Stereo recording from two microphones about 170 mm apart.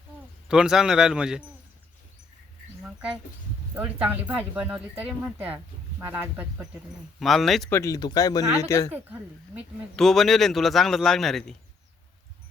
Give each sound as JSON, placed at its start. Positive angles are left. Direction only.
{"t": 0.4, "sound": "speech", "side_deg": -5}
{"t": 3.8, "sound": "speech", "side_deg": -10}
{"t": 7.2, "sound": "speech", "side_deg": 0}
{"t": 7.7, "sound": "speech", "side_deg": 20}
{"t": 8.9, "sound": "speech", "side_deg": -10}
{"t": 9.9, "sound": "speech", "side_deg": 0}